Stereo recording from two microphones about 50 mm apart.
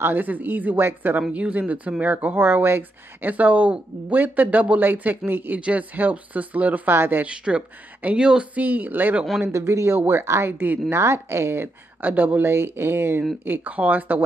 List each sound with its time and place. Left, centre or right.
0.0 s speech: right
2.3 s speech: right
3.3 s speech: right
5.6 s speech: right
6.9 s speech: right
7.2 s speech: right
8.5 s speech: right
9.5 s speech: right
9.9 s speech: right
10.2 s a woman's voice: right
11.6 s speech: right
12.4 s speech: right
13.5 s speech: right